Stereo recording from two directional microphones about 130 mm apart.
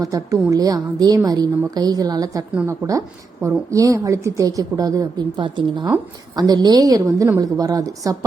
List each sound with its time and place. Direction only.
0.0 s a woman's voice: 25° right (ahead or behind)